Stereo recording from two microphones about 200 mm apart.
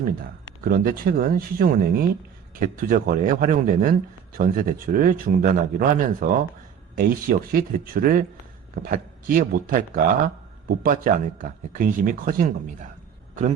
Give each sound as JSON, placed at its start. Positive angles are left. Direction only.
{"t": 0.6, "sound": "speech", "side_deg": -50}